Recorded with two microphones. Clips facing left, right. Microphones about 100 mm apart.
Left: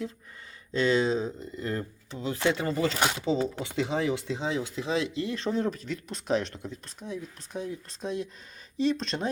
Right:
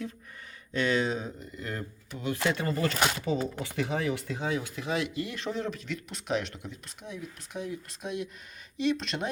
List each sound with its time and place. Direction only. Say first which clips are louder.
0.7 s speech: left 3 dB; 30° left (ahead or behind)